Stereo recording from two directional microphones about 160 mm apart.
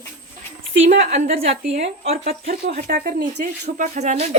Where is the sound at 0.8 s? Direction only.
45° right (ahead or behind).